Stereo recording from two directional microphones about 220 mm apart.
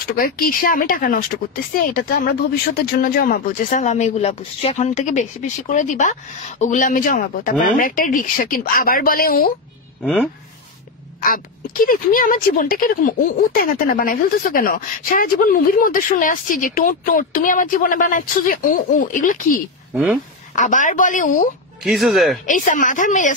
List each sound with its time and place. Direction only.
0.2 s speech: 40° left (ahead or behind)
10.0 s speech: centre (ahead or behind)
11.1 s speech: 40° left (ahead or behind)
19.9 s speech: centre (ahead or behind)
20.5 s speech: 35° left (ahead or behind)
21.8 s speech: centre (ahead or behind)
22.5 s speech: 35° left (ahead or behind)